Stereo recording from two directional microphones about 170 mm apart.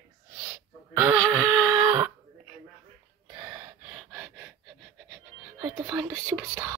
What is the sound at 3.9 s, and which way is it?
Gasp, centre (ahead or behind).